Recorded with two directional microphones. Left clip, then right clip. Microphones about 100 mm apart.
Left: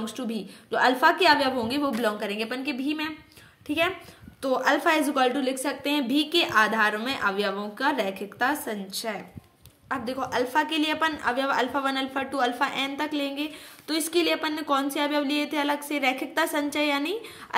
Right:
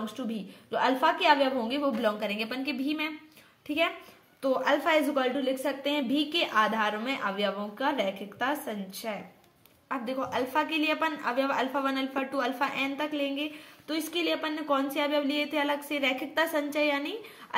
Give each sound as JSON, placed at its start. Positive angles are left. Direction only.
{"t": 0.0, "sound": "a woman's voice", "side_deg": 40}